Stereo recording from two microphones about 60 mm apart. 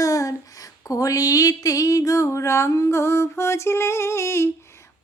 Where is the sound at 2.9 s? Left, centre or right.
Left.